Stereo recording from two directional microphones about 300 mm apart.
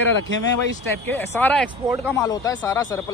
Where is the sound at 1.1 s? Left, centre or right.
Centre.